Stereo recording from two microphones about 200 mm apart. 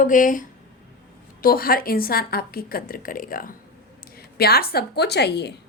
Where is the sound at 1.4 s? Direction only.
45° left (ahead or behind).